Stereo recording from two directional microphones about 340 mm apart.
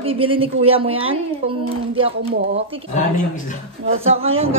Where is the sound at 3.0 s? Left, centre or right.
Left.